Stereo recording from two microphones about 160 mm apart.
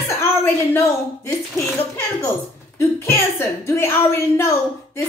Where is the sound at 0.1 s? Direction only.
15° left (ahead or behind).